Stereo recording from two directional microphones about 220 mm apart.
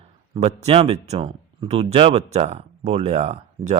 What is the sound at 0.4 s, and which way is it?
Speech, 25° right (ahead or behind).